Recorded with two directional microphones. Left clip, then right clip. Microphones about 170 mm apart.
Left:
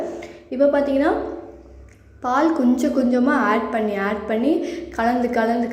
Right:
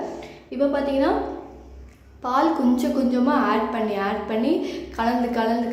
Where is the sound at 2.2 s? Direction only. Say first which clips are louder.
Left 2 dB; 20° left (ahead or behind).